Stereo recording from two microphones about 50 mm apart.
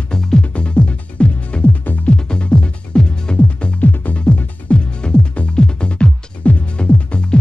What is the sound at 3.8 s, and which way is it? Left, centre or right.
Music, left.